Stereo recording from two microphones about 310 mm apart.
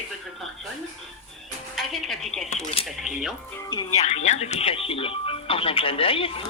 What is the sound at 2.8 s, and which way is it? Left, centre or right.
Speech, centre.